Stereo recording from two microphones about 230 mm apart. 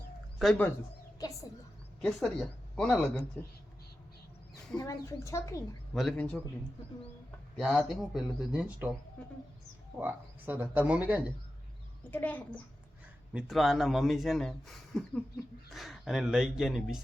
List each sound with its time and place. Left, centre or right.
0.3 s speech: centre
2.0 s speech: centre
4.8 s a woman's voice: centre
5.9 s speech: centre
9.2 s speech: centre
10.0 s speech: centre
12.1 s a woman's voice: centre